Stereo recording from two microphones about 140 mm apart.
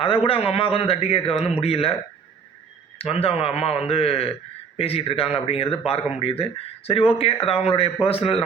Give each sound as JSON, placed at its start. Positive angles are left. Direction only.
{"t": 0.0, "sound": "a man's voice", "side_deg": 40}
{"t": 3.0, "sound": "a man's voice", "side_deg": 45}